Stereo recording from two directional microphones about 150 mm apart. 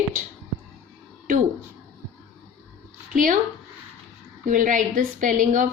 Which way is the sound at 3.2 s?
60° right (ahead or behind).